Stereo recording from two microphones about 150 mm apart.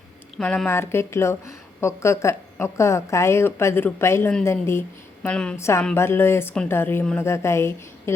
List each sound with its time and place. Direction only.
0.3 s a woman's voice: 5° left (ahead or behind)
5.2 s a woman's voice: 5° left (ahead or behind)
5.5 s a woman's voice: 20° left (ahead or behind)